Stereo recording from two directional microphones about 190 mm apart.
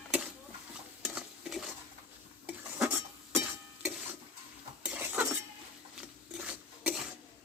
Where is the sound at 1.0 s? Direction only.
Centre (ahead or behind).